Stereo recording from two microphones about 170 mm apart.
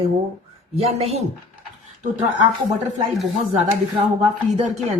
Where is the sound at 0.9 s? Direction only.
35° right (ahead or behind).